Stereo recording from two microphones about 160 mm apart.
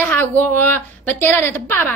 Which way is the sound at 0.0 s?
10° left (ahead or behind).